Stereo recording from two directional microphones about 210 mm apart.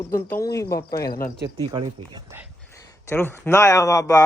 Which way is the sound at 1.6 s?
25° right (ahead or behind).